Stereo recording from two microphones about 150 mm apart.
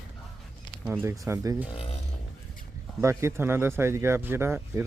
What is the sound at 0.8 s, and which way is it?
Speech, 10° right (ahead or behind).